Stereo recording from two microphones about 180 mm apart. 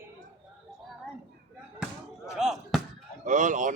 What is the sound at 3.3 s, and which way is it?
Speech, 45° right (ahead or behind).